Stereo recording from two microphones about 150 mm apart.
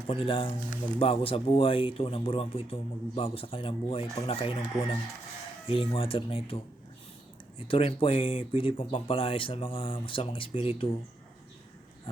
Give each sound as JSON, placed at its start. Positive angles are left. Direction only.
{"t": 0.1, "sound": "speech", "side_deg": 35}
{"t": 7.7, "sound": "speech", "side_deg": 40}